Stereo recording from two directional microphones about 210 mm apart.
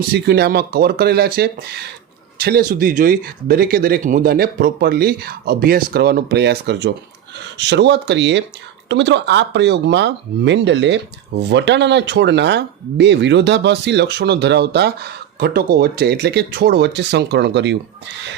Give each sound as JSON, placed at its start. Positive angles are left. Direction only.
{"t": 0.1, "sound": "speech", "side_deg": -50}